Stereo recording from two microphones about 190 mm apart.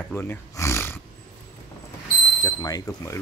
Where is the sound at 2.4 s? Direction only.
20° left (ahead or behind).